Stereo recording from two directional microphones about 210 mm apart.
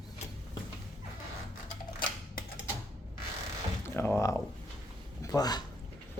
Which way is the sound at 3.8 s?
10° left (ahead or behind).